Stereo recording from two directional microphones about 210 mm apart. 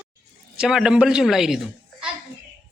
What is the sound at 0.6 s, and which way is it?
A woman's voice, 5° right (ahead or behind).